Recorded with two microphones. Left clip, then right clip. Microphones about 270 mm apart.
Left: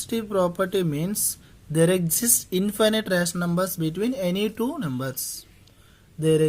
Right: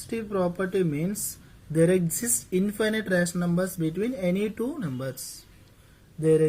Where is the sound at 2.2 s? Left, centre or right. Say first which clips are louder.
Left 3 dB; left.